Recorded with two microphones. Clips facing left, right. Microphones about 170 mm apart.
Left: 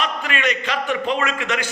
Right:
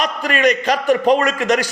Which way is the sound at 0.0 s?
40° right (ahead or behind).